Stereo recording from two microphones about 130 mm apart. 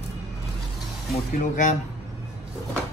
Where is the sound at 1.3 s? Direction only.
80° left.